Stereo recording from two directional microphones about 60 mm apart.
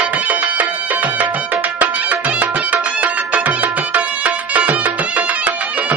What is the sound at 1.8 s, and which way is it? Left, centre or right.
Music, right.